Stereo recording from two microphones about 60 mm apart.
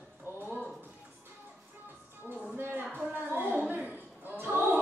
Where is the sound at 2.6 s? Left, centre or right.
Right.